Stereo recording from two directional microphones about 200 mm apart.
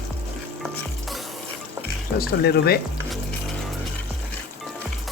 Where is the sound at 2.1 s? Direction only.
50° left (ahead or behind).